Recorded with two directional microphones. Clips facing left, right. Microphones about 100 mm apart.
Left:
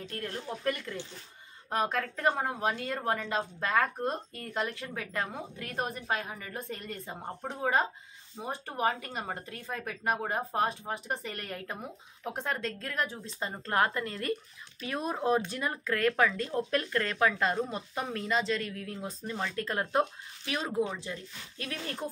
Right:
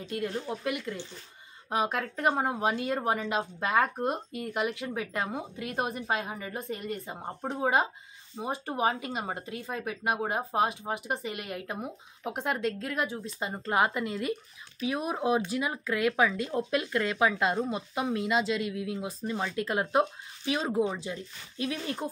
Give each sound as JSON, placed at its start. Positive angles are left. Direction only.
{"t": 0.0, "sound": "speech", "side_deg": -15}
{"t": 6.7, "sound": "speech", "side_deg": -10}